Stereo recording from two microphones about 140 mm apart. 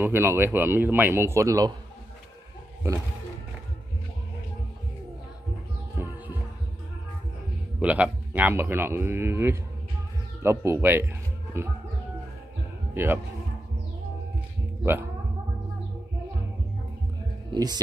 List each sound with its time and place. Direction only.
0.0 s speech: 15° right (ahead or behind)
5.9 s music: 15° right (ahead or behind)
7.8 s speech: 10° right (ahead or behind)
12.9 s speech: 15° right (ahead or behind)
17.5 s speech: 30° right (ahead or behind)